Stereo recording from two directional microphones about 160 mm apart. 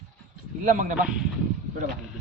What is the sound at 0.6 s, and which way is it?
Speech, 55° right (ahead or behind).